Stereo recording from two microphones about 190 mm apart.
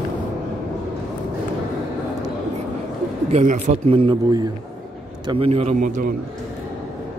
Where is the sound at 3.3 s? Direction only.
40° right (ahead or behind).